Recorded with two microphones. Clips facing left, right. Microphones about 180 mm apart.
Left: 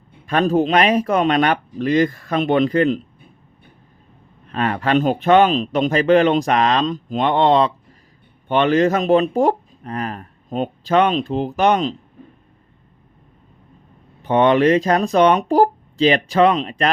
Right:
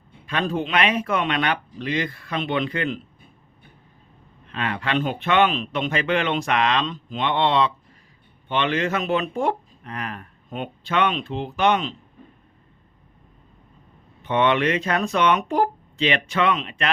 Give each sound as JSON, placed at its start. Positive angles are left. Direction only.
{"t": 0.3, "sound": "speech", "side_deg": 45}
{"t": 4.4, "sound": "speech", "side_deg": 40}
{"t": 14.2, "sound": "speech", "side_deg": 40}